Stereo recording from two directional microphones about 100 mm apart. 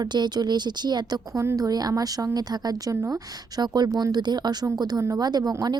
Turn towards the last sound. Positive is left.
turn(degrees=-40)  # may be behind; listen again after turning